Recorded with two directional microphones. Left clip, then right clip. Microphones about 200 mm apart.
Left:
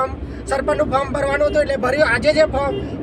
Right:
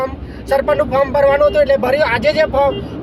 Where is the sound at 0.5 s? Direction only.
20° right (ahead or behind).